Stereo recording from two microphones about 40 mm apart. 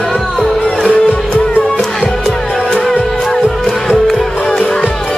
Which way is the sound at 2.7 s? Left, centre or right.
Centre.